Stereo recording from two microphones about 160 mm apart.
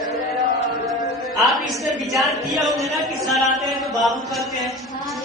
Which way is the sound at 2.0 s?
Centre (ahead or behind).